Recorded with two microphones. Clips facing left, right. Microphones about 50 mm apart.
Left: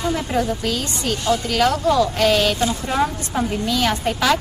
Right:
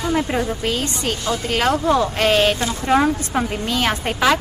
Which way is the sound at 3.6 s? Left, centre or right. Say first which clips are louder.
Left 1 dB; right.